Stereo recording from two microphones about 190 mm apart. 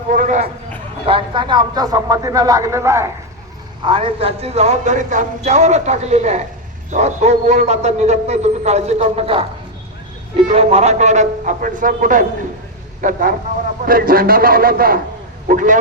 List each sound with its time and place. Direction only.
0.1 s a sound: 45° right (ahead or behind)
1.0 s speech: 25° right (ahead or behind)
3.8 s a man's voice: 25° right (ahead or behind); by 15.8 s 45° right (ahead or behind)